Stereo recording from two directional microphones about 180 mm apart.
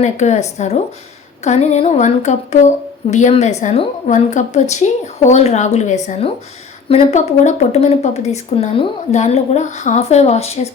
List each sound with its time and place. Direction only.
0.0 s speech: 40° left (ahead or behind)